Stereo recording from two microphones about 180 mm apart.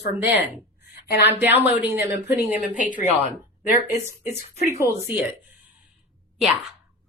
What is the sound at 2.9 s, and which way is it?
Speech, 45° left (ahead or behind).